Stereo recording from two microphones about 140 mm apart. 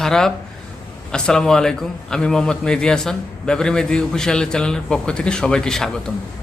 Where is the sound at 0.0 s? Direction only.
5° left (ahead or behind).